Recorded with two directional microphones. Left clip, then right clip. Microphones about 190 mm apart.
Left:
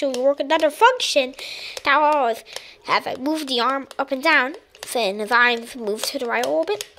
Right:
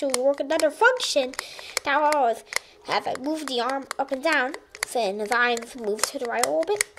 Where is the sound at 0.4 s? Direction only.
5° left (ahead or behind).